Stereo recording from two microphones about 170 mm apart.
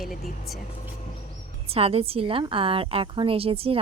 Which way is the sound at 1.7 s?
35° right (ahead or behind).